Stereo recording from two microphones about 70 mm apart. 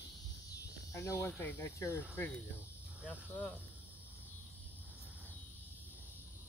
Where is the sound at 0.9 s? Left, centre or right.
Left.